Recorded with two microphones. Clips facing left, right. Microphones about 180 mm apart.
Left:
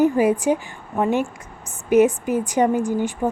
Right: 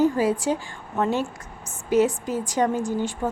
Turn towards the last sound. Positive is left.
turn(degrees=15)  # may be behind; listen again after turning